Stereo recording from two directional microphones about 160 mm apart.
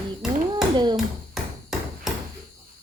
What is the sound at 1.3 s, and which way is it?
Hammer, centre (ahead or behind).